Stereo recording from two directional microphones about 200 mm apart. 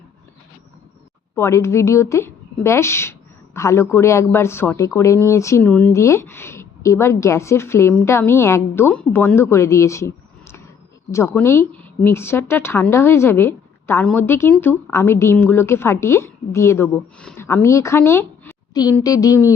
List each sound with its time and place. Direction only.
1.4 s speech: 15° left (ahead or behind)